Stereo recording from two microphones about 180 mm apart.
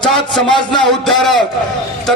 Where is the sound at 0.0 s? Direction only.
Centre (ahead or behind).